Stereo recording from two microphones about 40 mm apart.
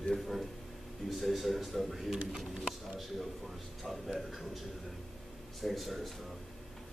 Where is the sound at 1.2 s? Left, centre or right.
Centre.